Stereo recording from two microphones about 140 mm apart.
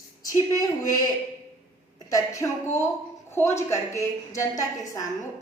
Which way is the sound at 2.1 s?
20° left (ahead or behind).